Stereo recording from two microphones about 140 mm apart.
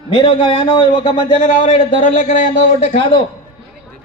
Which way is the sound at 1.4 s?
70° left (ahead or behind).